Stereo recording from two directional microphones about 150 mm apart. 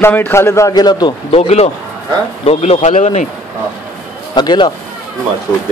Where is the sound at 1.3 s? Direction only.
45° left (ahead or behind).